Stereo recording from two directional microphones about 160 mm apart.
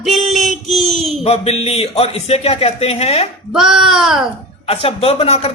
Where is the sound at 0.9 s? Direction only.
40° right (ahead or behind).